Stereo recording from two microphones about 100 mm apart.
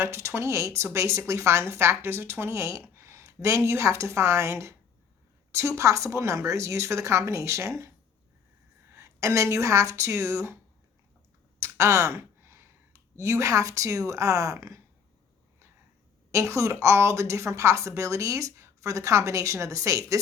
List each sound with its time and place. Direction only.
0.0 s a woman's voice: 25° right (ahead or behind)
11.6 s a sound: 30° right (ahead or behind)
14.1 s speech: 35° right (ahead or behind)
16.3 s a woman's voice: 30° right (ahead or behind)